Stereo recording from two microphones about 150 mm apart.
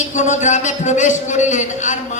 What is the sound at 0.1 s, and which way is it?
A man's voice, 55° left (ahead or behind).